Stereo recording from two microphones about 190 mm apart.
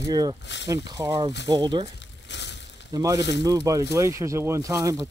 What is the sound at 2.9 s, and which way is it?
Speech, 15° right (ahead or behind).